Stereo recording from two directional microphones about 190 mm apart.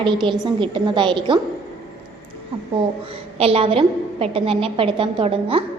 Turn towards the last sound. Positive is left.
turn(degrees=-30)  # may be behind; listen again after turning